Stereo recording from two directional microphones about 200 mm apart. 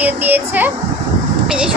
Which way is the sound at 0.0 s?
10° right (ahead or behind).